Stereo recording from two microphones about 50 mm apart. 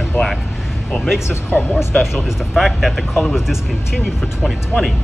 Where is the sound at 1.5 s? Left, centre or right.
Left.